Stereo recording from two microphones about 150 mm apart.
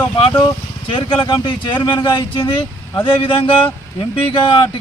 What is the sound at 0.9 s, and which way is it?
Speech, 35° left (ahead or behind).